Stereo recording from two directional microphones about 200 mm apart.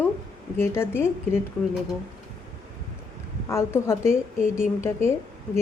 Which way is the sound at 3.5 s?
15° left (ahead or behind).